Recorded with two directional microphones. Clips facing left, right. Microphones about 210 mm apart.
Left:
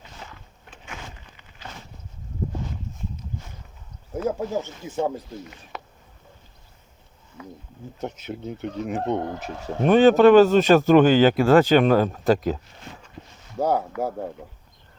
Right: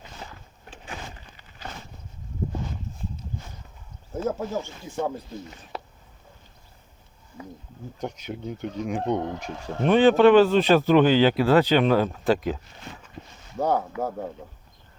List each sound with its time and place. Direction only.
4.3 s speech: 20° left (ahead or behind)
5.7 s a sound: 35° right (ahead or behind)
8.0 s speech: 5° left (ahead or behind)
9.8 s speech: 45° left (ahead or behind)
13.6 s speech: 10° left (ahead or behind)